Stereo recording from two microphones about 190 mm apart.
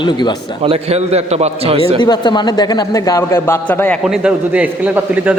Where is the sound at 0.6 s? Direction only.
30° right (ahead or behind).